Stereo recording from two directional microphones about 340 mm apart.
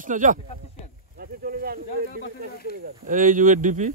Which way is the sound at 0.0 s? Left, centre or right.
Right.